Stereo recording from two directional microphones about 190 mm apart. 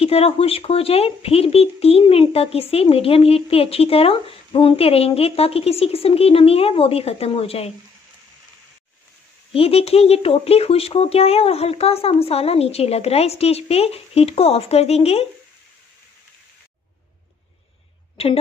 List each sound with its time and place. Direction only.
0.0 s speech: 30° left (ahead or behind)
9.5 s speech: 30° left (ahead or behind)
18.1 s a woman's voice: 30° left (ahead or behind)